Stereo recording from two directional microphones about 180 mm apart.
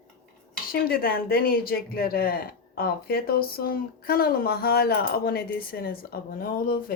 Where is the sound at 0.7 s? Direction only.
55° left (ahead or behind).